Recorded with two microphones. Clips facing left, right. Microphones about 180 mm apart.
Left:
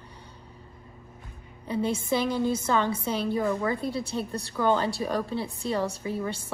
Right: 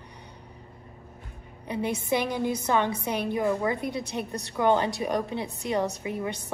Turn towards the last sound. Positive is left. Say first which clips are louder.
# even
turn(degrees=-15)  # may be behind; listen again after turning